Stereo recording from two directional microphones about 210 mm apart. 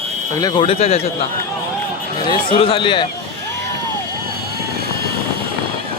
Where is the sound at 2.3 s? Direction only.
25° left (ahead or behind).